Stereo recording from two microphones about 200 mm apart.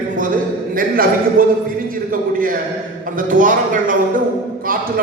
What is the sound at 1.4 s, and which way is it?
Speech, 45° right (ahead or behind).